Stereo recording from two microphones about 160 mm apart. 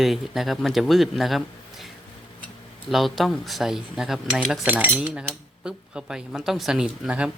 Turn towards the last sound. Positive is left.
turn(degrees=-5)  # may be behind; listen again after turning